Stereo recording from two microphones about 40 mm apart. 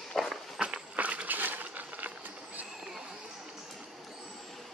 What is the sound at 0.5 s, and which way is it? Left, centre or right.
Walk, right.